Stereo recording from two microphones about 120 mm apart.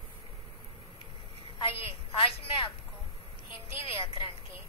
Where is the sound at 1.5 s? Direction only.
45° left (ahead or behind).